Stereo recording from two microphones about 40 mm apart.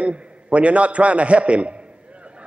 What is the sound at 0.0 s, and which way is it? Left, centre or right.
A man's voice, right.